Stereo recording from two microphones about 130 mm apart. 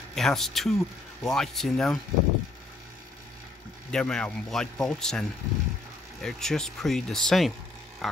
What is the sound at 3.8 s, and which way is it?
Speech, 5° left (ahead or behind).